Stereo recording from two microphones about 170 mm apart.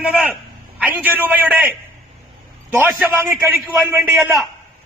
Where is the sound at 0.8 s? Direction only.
10° right (ahead or behind).